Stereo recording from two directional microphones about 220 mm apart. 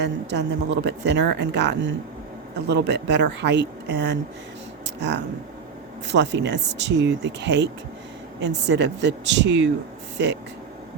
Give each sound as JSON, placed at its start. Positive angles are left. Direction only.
{"t": 0.0, "sound": "speech", "side_deg": -50}